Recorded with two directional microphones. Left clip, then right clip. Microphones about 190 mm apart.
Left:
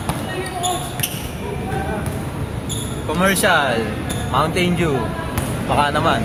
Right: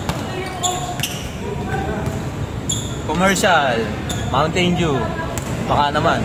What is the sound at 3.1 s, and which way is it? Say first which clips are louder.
Speech: right 1 dB; 10° right (ahead or behind).